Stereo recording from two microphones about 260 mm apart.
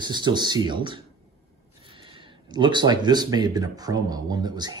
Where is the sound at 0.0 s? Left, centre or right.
Centre.